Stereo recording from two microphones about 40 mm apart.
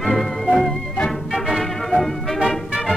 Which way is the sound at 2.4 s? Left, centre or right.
Centre.